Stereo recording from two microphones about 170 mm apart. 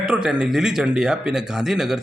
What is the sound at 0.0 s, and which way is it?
Speech, 5° right (ahead or behind).